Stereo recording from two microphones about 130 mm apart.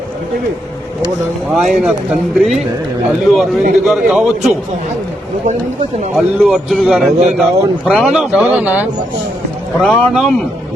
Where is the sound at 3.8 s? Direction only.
5° right (ahead or behind).